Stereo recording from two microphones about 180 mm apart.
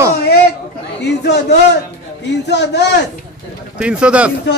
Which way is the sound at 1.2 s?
70° left (ahead or behind).